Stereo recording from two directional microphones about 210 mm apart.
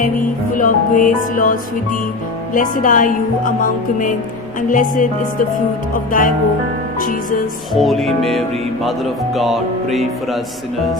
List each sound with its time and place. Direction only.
0.5 s speech: 40° left (ahead or behind)
7.7 s music: centre (ahead or behind)